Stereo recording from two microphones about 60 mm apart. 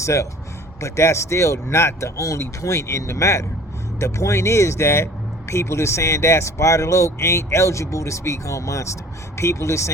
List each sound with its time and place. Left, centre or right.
0.0 s speech: left